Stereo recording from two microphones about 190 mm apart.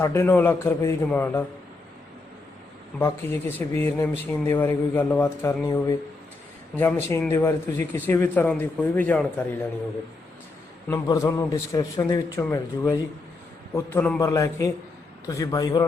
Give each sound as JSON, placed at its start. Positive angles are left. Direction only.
{"t": 0.0, "sound": "speech", "side_deg": 15}
{"t": 3.0, "sound": "speech", "side_deg": 10}
{"t": 10.8, "sound": "a man's voice", "side_deg": 20}